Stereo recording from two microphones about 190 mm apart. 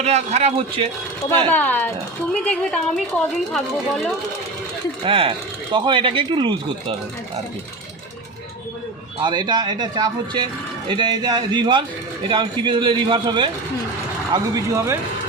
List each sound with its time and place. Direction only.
0.0 s speech: 35° right (ahead or behind)
1.5 s speech: 10° left (ahead or behind)
5.0 s speech: 25° right (ahead or behind)
9.2 s speech: 25° right (ahead or behind)